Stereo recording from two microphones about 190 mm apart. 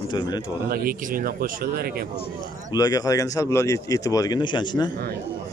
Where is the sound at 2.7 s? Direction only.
20° left (ahead or behind).